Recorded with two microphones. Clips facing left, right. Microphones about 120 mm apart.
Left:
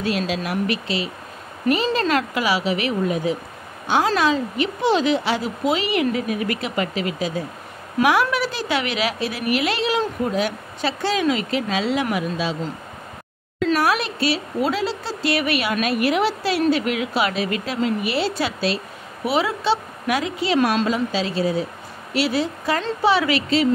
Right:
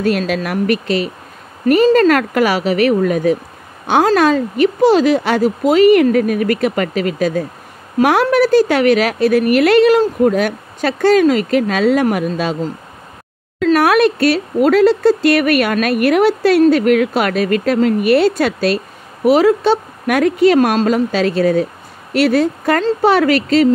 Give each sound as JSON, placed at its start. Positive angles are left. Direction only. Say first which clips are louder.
{"t": 0.0, "sound": "a woman's voice", "louder": "right 7 dB", "side_deg": -55}
{"t": 3.0, "sound": "a woman's voice", "louder": "right 7 dB", "side_deg": -60}
{"t": 13.7, "sound": "a woman's voice", "louder": "right 12 dB", "side_deg": -55}